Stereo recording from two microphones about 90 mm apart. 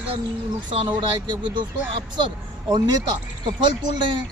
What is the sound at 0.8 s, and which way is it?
Speech, 60° right (ahead or behind).